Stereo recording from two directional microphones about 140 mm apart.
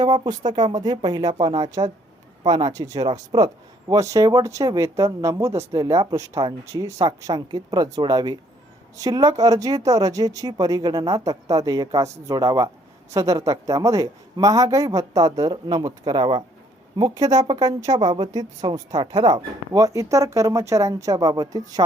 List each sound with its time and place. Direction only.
0.0 s speech: 30° right (ahead or behind)